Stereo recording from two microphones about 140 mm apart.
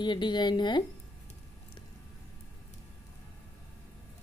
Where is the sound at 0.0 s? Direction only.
35° left (ahead or behind).